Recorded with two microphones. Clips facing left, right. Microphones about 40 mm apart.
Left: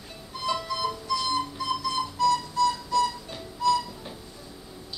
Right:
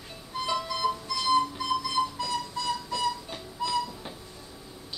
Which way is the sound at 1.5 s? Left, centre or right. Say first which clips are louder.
Even; centre.